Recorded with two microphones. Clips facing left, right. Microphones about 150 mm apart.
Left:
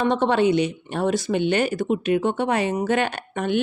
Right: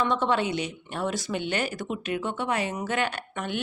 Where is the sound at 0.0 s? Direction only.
65° left (ahead or behind).